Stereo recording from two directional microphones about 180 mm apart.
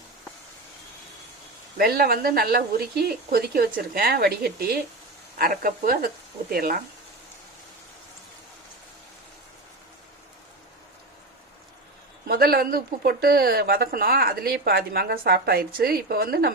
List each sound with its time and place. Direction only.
1.8 s speech: 55° right (ahead or behind)
12.3 s speech: 55° right (ahead or behind)